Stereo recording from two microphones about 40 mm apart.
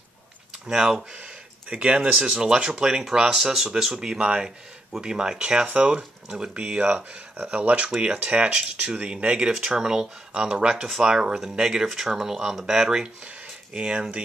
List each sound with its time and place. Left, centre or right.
0.7 s speech: centre
1.1 s speech: right
2.1 s speech: centre
4.2 s speech: right